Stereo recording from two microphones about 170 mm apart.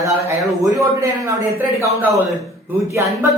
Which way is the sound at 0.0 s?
20° right (ahead or behind).